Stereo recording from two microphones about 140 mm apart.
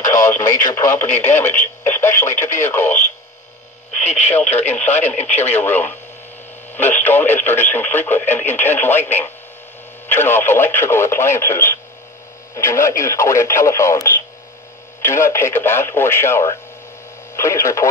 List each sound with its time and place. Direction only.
0.0 s speech: 20° left (ahead or behind)
4.0 s speech: 55° left (ahead or behind)
4.6 s speech: 15° left (ahead or behind)